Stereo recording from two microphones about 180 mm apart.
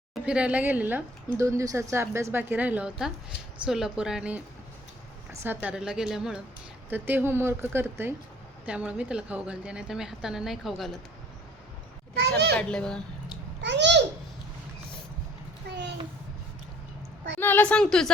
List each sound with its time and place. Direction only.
0.1 s a woman's voice: 5° right (ahead or behind)
12.5 s a woman's voice: 5° left (ahead or behind)
13.6 s a child's voice: 75° right (ahead or behind)
15.6 s a sound: 65° right (ahead or behind)
17.4 s a woman's voice: 10° left (ahead or behind)